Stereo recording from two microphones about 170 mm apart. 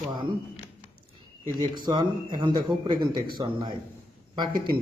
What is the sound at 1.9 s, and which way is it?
Speech, 25° right (ahead or behind).